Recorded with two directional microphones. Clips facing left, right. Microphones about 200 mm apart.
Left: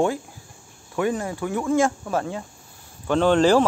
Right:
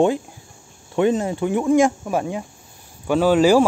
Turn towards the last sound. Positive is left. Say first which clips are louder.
# right 2 dB
turn(degrees=-10)  # may be behind; listen again after turning